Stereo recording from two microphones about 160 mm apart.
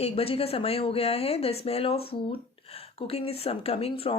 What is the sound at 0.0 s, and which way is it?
Speech, 35° left (ahead or behind).